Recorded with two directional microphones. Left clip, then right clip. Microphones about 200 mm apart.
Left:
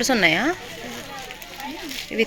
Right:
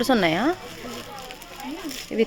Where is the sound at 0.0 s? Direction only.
15° right (ahead or behind).